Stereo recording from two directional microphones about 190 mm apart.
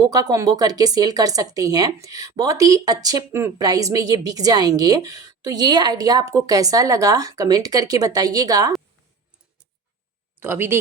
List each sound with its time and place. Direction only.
0.1 s speech: 20° right (ahead or behind)
10.4 s speech: 10° right (ahead or behind)